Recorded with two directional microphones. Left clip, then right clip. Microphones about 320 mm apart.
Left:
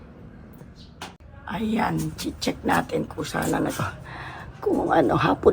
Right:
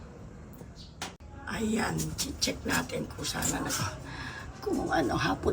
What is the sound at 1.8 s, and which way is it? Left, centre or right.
Speech, centre.